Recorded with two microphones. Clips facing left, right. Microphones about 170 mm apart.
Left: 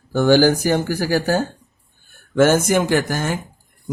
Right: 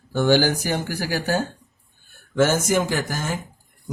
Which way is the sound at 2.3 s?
55° left (ahead or behind).